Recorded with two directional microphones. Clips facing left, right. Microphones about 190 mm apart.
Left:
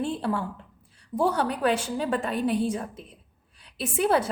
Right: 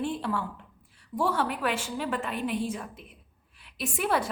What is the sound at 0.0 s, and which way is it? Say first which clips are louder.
A woman's voice: left 3 dB; 30° left (ahead or behind).